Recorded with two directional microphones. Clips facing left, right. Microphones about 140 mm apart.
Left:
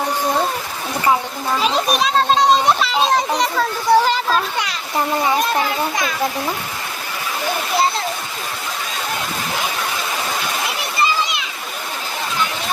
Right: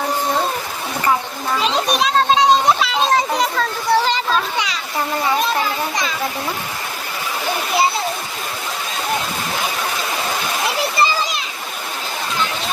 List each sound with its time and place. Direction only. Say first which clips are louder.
1.6 s children playing: even; centre (ahead or behind)
11.0 s splash: left 1 dB; 35° right (ahead or behind)